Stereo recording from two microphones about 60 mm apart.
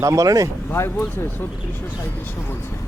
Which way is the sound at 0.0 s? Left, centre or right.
Right.